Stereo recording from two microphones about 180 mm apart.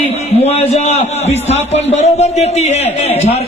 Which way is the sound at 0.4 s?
35° left (ahead or behind).